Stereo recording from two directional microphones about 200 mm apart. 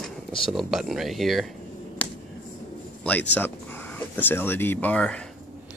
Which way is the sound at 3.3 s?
10° left (ahead or behind).